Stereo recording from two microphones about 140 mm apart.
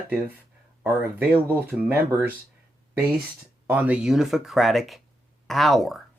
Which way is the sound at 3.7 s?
10° right (ahead or behind).